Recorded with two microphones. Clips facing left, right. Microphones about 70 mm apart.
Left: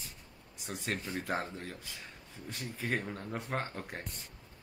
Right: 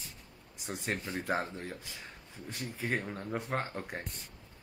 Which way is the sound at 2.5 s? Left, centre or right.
Centre.